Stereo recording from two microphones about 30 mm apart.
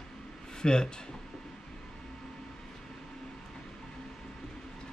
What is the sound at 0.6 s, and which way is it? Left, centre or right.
Speech, left.